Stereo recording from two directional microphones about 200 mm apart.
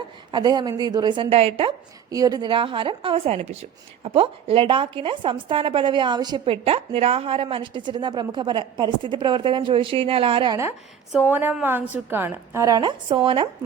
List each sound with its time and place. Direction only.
0.3 s a woman's voice: 20° right (ahead or behind)
11.1 s a woman's voice: 10° right (ahead or behind); by 13.5 s 25° right (ahead or behind)